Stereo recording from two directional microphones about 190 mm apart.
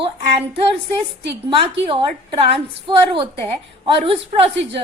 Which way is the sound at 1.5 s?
25° right (ahead or behind).